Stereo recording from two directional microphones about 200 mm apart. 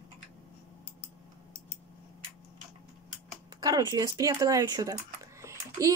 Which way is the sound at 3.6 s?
20° right (ahead or behind).